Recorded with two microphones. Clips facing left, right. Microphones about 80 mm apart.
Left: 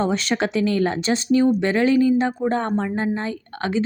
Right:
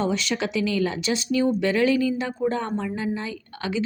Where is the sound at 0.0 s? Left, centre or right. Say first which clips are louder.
Left 3 dB; left.